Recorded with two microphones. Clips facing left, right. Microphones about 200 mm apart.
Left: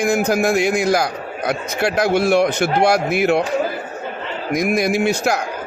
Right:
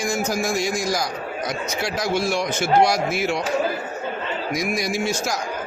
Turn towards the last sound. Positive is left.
turn(degrees=60)  # may be behind; listen again after turning